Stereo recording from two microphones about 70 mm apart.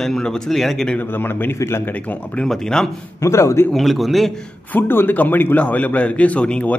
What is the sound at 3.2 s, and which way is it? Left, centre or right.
Speech, left.